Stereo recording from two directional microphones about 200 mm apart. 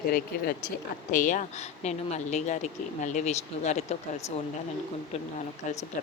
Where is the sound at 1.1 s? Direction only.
40° left (ahead or behind).